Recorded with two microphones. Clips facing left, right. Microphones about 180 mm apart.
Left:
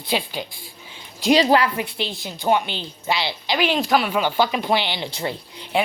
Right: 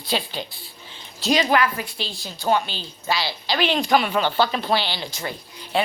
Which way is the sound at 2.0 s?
20° left (ahead or behind).